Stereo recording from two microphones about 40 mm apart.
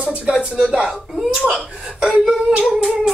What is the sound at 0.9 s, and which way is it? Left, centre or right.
Hands, centre.